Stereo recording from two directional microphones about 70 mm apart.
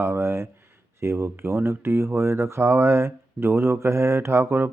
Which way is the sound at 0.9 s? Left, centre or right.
Right.